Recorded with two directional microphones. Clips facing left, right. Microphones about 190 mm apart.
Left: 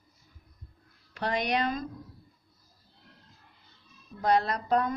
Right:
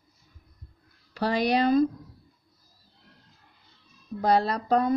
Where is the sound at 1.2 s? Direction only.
35° right (ahead or behind).